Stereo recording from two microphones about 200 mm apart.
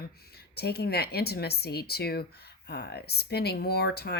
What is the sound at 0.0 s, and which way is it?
A woman's voice, 50° left (ahead or behind).